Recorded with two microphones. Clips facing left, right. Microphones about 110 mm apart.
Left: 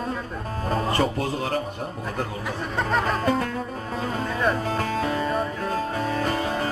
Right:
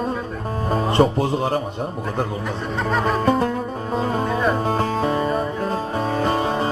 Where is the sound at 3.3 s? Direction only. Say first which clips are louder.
Right 5 dB; 25° right (ahead or behind).